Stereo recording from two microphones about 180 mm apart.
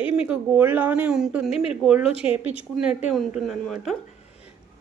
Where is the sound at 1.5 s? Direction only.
35° left (ahead or behind).